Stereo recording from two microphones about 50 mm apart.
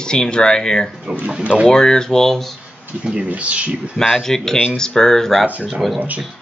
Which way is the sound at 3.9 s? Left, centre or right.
Centre.